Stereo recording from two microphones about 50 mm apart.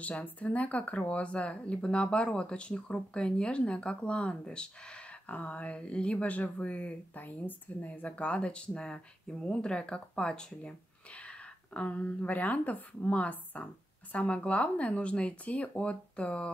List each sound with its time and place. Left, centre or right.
0.0 s speech: left